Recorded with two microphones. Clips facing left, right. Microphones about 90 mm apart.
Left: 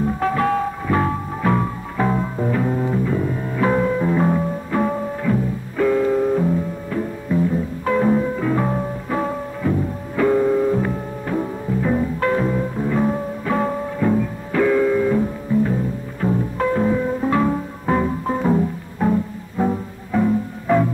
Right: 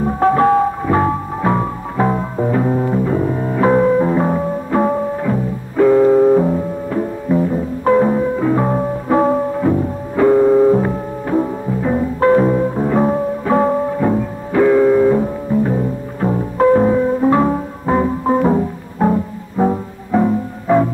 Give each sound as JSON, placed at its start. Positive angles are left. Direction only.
{"t": 0.0, "sound": "music", "side_deg": -35}